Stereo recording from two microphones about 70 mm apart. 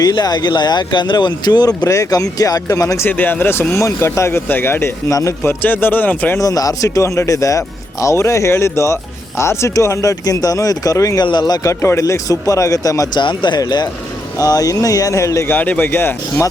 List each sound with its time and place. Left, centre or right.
0.0 s speech: left
3.0 s speech: left
3.8 s speech: left
6.4 s speech: left
11.2 s speech: left
11.7 s speech: left
13.1 s speech: left
14.3 s speech: left
15.4 s speech: left